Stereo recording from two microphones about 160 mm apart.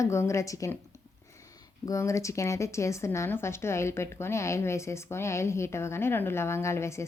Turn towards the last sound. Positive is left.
turn(degrees=15)  # may be behind; listen again after turning